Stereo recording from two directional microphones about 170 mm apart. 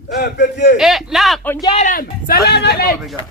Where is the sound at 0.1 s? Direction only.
80° left.